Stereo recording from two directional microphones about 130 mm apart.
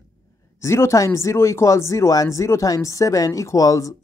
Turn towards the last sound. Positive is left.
turn(degrees=25)  # may be behind; listen again after turning